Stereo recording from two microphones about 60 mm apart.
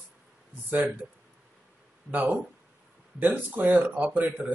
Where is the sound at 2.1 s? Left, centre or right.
Right.